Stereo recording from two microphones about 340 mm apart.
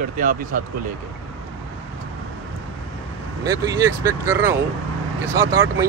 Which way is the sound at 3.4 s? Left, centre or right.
Centre.